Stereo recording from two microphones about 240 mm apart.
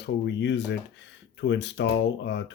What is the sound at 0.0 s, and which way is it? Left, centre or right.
Speech, left.